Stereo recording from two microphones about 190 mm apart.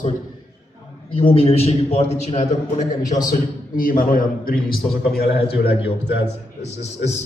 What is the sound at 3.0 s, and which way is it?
Speech, 20° left (ahead or behind).